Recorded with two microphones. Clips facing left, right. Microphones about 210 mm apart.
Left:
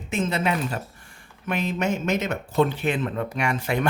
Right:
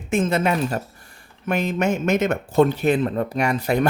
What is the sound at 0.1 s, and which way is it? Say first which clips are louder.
Speech: right 4 dB; 50° right (ahead or behind).